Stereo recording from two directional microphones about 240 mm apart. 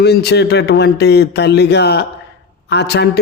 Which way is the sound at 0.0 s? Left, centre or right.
Left.